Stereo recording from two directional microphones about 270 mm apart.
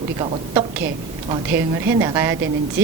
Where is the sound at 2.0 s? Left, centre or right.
Centre.